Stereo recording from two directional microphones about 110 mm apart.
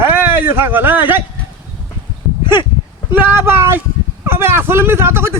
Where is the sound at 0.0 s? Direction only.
20° right (ahead or behind).